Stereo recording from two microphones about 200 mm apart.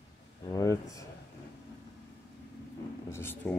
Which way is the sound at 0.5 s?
15° left (ahead or behind).